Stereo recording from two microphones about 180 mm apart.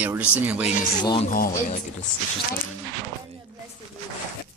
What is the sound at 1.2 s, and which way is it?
Speech, 55° left (ahead or behind).